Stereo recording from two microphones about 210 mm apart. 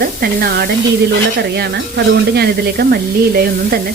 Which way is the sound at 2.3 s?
50° right (ahead or behind).